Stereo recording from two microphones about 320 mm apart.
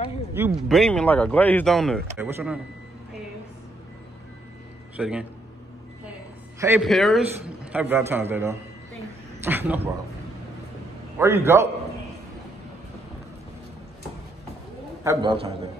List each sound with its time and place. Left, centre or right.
0.3 s speech: centre
4.9 s a man's voice: centre
6.6 s a man's voice: centre
11.1 s a man's voice: centre
15.0 s a man's voice: centre